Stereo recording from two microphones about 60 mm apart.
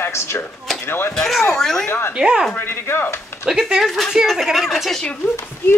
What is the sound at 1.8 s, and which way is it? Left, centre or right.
Speech, left.